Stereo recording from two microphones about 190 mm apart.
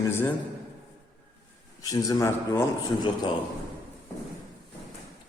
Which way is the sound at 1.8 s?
20° left (ahead or behind).